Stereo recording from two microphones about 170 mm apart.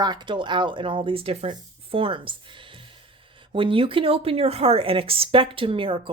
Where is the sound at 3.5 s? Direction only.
30° right (ahead or behind).